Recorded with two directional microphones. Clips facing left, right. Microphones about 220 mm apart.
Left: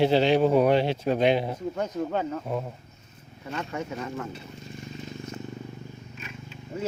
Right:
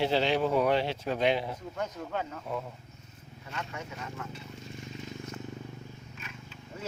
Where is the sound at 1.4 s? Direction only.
35° left (ahead or behind).